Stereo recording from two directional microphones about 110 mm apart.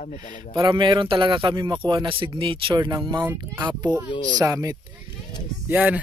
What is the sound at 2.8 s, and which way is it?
Speech, 40° right (ahead or behind).